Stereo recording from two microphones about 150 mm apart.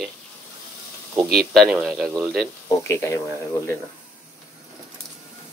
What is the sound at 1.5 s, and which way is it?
Speech, centre (ahead or behind).